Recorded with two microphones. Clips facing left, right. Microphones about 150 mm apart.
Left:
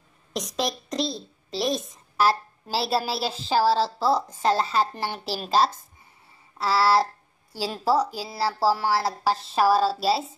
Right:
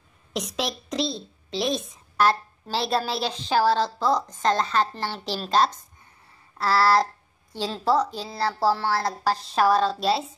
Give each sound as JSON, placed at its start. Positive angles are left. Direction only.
{"t": 0.3, "sound": "a woman's voice", "side_deg": 0}